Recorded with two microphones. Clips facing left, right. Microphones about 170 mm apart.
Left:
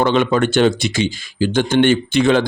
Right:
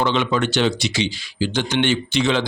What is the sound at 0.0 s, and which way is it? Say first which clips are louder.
Speech: left 5 dB; 50° left (ahead or behind).